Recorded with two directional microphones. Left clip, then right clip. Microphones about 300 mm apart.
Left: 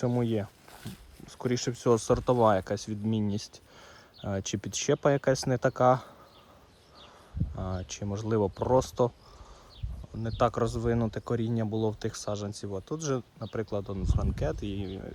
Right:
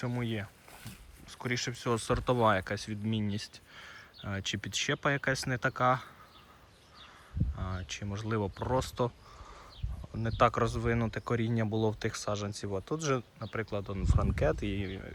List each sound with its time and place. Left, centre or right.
0.0 s speech: left
7.5 s speech: centre
10.2 s speech: centre